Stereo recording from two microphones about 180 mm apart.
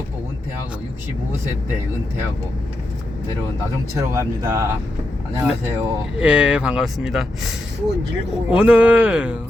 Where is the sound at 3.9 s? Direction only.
15° right (ahead or behind).